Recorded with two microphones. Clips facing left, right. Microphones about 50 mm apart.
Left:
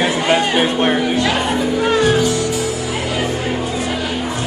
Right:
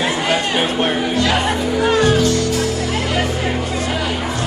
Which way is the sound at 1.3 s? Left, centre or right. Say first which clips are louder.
Even; centre.